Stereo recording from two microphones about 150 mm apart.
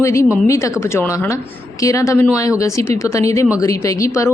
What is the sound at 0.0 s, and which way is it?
Speech, 20° left (ahead or behind).